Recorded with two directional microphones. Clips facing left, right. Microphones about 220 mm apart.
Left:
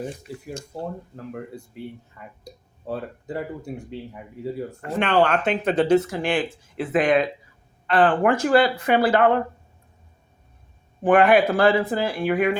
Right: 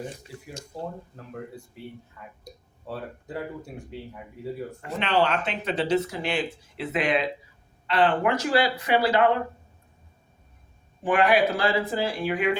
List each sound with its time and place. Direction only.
4.8 s speech: 50° left (ahead or behind)
11.0 s speech: 55° left (ahead or behind)